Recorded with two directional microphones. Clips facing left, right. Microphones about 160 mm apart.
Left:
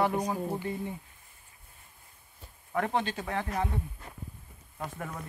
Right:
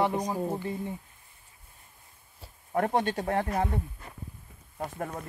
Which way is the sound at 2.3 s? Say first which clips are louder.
Right 3 dB; 40° right (ahead or behind).